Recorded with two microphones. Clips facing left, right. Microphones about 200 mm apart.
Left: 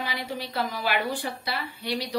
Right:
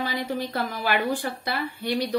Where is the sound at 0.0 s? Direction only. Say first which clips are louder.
Right 5 dB; 50° right (ahead or behind).